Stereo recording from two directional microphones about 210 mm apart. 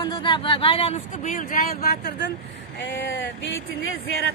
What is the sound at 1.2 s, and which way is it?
Speech, 40° left (ahead or behind).